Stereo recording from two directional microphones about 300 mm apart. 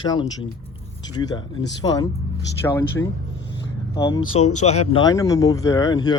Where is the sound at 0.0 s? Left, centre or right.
Centre.